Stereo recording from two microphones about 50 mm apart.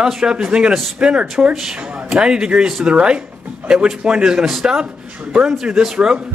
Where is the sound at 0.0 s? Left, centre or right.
Centre.